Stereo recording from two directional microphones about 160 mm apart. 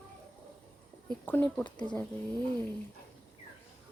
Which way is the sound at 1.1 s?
10° left (ahead or behind).